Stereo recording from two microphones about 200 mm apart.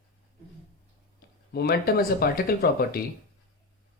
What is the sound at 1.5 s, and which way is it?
Speech, 50° left (ahead or behind).